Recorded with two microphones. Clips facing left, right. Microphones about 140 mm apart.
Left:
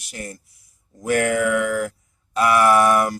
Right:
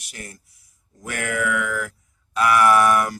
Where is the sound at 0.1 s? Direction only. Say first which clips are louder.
Left 6 dB; 35° left (ahead or behind).